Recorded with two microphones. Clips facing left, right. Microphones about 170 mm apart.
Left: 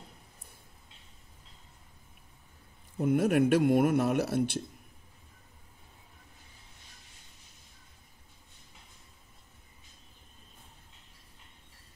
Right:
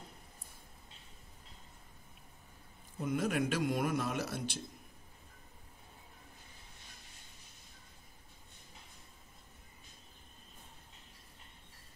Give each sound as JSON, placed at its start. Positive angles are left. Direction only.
{"t": 3.0, "sound": "speech", "side_deg": 60}